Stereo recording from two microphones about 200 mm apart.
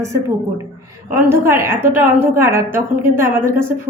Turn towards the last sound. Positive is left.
turn(degrees=-10)  # may be behind; listen again after turning